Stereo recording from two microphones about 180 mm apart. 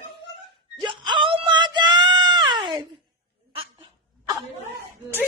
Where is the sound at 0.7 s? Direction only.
25° right (ahead or behind).